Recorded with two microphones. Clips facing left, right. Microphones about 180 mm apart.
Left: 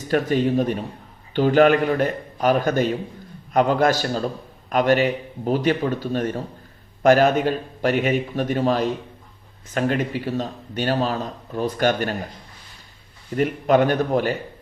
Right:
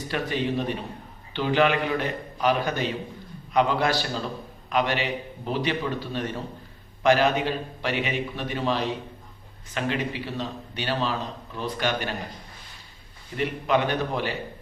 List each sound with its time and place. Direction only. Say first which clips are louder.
0.1 s a man's voice: left 8 dB; 45° left (ahead or behind)
13.3 s a man's voice: left 6 dB; 45° left (ahead or behind)